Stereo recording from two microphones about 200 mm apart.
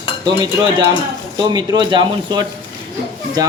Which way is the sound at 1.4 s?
20° right (ahead or behind).